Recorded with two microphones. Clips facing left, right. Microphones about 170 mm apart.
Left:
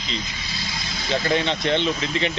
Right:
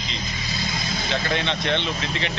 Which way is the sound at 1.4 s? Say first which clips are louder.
Left 2 dB; 35° left (ahead or behind).